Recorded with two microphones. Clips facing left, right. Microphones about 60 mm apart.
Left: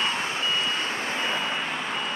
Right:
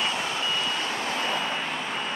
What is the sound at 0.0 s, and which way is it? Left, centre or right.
Reversing beeps, left.